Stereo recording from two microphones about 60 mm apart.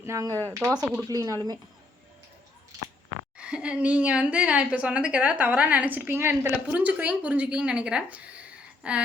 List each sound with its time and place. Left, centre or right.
0.1 s a woman's voice: right
1.0 s speech: right
3.3 s a woman's voice: centre
6.1 s a woman's voice: right
6.7 s a woman's voice: right